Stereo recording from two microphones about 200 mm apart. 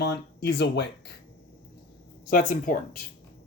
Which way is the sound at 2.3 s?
45° left (ahead or behind).